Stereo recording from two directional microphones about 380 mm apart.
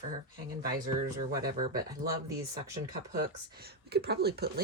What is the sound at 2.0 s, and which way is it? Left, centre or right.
Speech, right.